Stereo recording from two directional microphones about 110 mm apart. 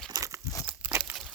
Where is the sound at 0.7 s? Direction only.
20° right (ahead or behind).